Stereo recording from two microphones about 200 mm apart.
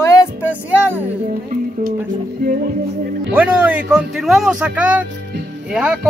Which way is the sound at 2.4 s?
50° right (ahead or behind).